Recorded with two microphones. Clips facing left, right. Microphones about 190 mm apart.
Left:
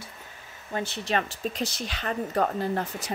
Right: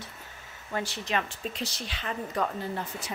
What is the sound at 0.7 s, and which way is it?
Speech, 25° left (ahead or behind).